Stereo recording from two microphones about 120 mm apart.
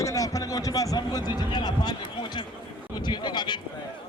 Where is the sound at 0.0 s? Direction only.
25° left (ahead or behind).